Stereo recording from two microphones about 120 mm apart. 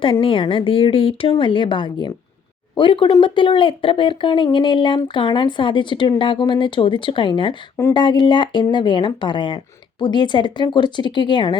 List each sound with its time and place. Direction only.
0.0 s speech: 50° left (ahead or behind)